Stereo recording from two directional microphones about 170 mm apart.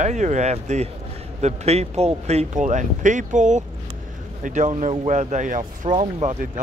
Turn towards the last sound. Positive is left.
turn(degrees=-40)  # may be behind; listen again after turning